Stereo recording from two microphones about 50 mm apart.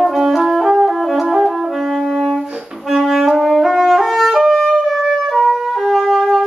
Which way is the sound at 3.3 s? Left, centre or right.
Centre.